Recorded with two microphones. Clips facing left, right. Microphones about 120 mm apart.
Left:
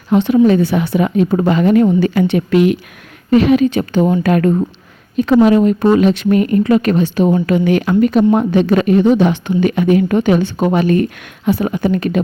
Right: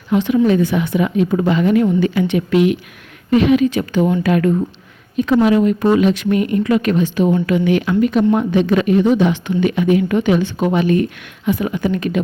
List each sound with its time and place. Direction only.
0.1 s speech: 30° left (ahead or behind)